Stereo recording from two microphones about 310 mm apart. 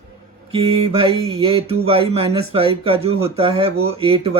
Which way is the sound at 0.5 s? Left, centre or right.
Centre.